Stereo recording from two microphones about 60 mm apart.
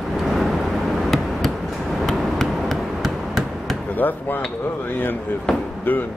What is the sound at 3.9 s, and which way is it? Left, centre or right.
Speech, left.